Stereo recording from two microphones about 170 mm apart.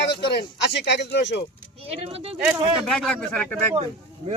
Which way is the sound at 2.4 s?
Centre (ahead or behind).